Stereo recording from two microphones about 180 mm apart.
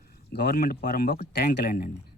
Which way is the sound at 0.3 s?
65° left (ahead or behind).